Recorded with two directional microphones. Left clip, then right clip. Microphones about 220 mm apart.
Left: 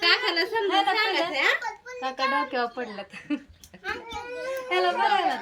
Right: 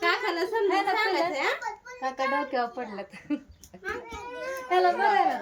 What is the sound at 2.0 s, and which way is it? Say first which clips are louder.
A woman's voice: left 2 dB; centre (ahead or behind).